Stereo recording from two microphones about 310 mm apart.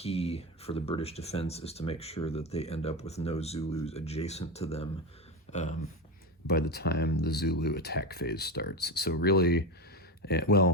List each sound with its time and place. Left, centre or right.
0.0 s speech: centre
5.5 s a sound: left
6.5 s speech: left